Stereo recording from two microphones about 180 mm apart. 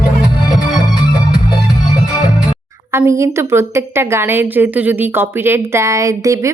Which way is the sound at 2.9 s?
15° right (ahead or behind).